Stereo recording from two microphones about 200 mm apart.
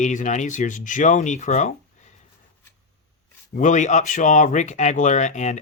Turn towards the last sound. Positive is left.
turn(degrees=35)  # may be behind; listen again after turning